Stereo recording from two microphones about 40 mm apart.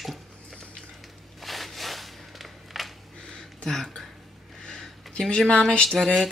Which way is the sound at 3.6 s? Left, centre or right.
Centre.